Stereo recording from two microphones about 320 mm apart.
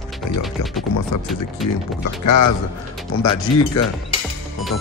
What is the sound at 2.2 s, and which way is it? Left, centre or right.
Speech, left.